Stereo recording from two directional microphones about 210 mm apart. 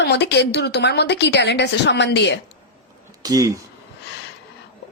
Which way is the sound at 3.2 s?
15° right (ahead or behind).